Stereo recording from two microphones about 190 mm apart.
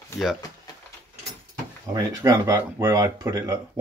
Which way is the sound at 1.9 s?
15° right (ahead or behind).